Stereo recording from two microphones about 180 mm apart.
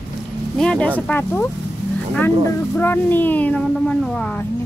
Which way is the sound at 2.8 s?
10° left (ahead or behind).